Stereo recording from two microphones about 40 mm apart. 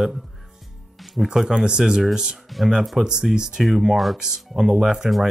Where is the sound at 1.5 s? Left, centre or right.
Right.